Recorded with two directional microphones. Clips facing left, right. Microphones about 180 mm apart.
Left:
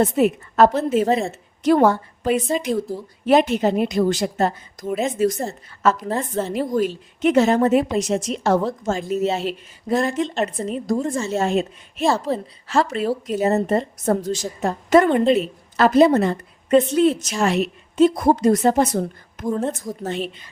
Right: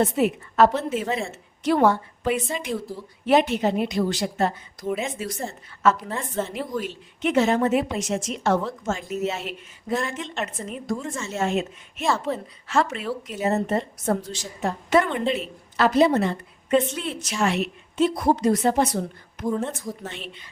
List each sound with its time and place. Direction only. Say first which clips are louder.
0.0 s a woman's voice: left 4 dB; 40° left (ahead or behind)